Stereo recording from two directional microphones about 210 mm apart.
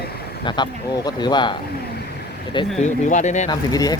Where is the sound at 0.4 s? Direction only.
20° left (ahead or behind).